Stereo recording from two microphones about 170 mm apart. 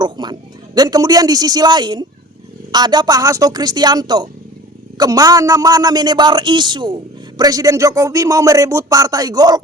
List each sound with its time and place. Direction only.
0.0 s a man's voice: 25° right (ahead or behind)